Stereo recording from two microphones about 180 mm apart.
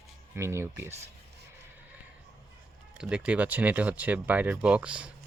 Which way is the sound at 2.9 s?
5° right (ahead or behind).